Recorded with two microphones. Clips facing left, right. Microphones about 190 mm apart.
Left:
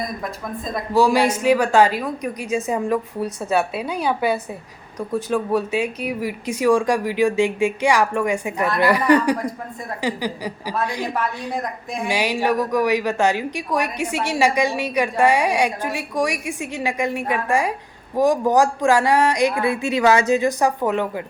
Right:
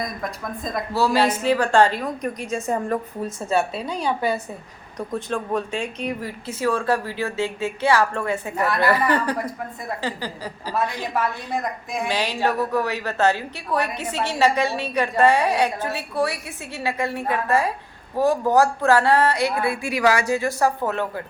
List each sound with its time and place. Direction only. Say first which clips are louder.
0.9 s a woman's voice: left 4 dB; 15° left (ahead or behind)